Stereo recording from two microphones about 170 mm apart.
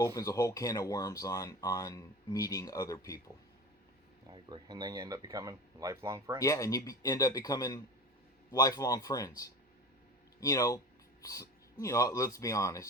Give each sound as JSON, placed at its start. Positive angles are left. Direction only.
{"t": 0.0, "sound": "speech", "side_deg": 20}
{"t": 4.3, "sound": "speech", "side_deg": -25}
{"t": 6.4, "sound": "speech", "side_deg": 20}